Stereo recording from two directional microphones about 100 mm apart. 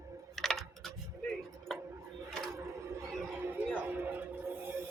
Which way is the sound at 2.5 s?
30° right (ahead or behind).